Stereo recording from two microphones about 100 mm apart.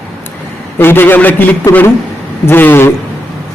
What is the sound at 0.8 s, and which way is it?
Speech, 20° left (ahead or behind).